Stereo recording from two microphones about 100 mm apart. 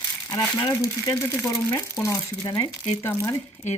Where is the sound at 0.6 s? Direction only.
30° left (ahead or behind).